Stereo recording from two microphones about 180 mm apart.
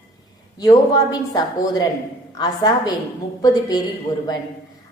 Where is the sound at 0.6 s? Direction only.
20° left (ahead or behind).